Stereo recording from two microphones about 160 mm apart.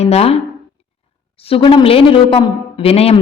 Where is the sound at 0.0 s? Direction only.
40° left (ahead or behind).